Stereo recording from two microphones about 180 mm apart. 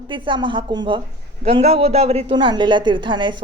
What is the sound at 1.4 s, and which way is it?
Speech, 35° right (ahead or behind).